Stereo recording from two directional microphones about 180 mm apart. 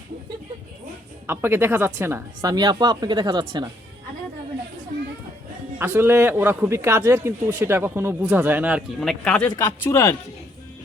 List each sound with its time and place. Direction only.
1.3 s speech: 10° right (ahead or behind)
5.8 s a man's voice: 10° right (ahead or behind); by 9.5 s 5° left (ahead or behind)
9.6 s speech: 15° left (ahead or behind)